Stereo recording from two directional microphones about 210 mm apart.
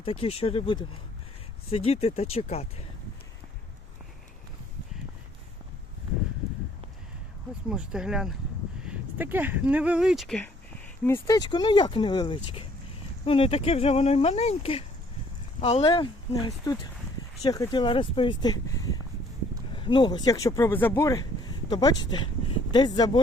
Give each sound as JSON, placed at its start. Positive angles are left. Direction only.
{"t": 0.0, "sound": "speech", "side_deg": 25}
{"t": 7.7, "sound": "speech", "side_deg": -5}
{"t": 11.0, "sound": "speech", "side_deg": 15}
{"t": 19.7, "sound": "speech", "side_deg": 25}